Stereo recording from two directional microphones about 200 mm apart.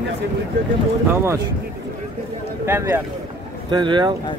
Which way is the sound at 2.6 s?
10° right (ahead or behind).